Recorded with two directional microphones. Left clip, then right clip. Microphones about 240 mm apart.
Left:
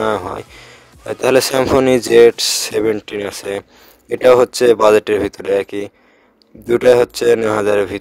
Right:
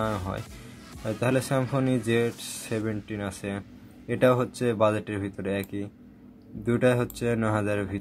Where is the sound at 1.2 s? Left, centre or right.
Left.